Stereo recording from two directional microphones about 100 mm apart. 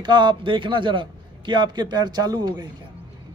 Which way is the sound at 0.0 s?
50° right (ahead or behind).